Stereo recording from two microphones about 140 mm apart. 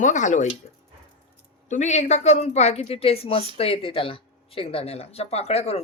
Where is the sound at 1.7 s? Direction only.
55° left (ahead or behind).